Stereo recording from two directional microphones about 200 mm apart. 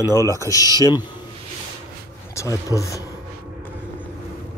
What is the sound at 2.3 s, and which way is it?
Speech, 15° left (ahead or behind).